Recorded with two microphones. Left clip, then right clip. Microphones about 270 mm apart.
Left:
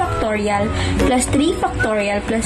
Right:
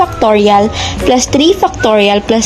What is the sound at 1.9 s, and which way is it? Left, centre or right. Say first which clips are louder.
Speech: right 10 dB; right.